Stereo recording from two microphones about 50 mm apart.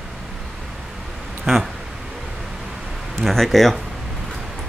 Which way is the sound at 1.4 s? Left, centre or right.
Centre.